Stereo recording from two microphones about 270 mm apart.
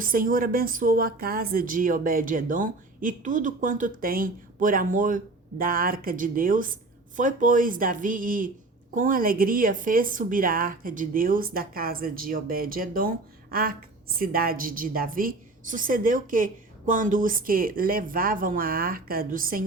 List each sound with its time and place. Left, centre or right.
0.0 s a woman's voice: right